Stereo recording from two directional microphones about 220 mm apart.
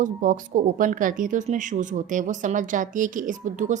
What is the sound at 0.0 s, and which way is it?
Speech, 35° right (ahead or behind).